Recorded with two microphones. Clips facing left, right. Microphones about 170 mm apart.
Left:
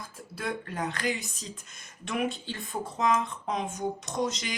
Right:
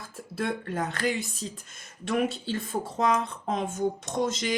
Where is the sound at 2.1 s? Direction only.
40° right (ahead or behind).